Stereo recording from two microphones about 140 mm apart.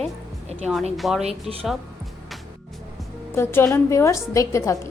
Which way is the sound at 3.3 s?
15° left (ahead or behind).